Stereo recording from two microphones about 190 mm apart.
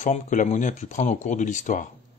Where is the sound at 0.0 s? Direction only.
40° left (ahead or behind).